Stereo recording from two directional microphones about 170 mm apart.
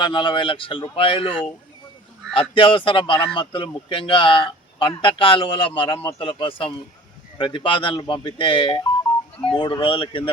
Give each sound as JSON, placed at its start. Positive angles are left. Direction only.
{"t": 0.0, "sound": "speech", "side_deg": 25}